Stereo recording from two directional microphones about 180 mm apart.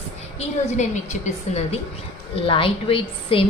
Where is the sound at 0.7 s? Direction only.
40° left (ahead or behind).